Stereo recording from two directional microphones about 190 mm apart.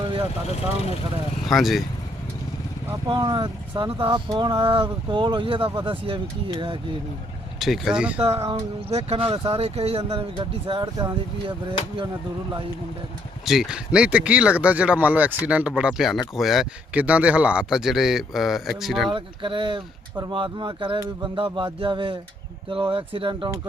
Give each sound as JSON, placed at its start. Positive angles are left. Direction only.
{"t": 1.5, "sound": "speech", "side_deg": 0}
{"t": 3.1, "sound": "speech", "side_deg": -20}
{"t": 7.6, "sound": "speech", "side_deg": 0}
{"t": 8.4, "sound": "speech", "side_deg": -20}
{"t": 8.9, "sound": "speech", "side_deg": -35}
{"t": 13.4, "sound": "speech", "side_deg": 0}
{"t": 19.1, "sound": "speech", "side_deg": -25}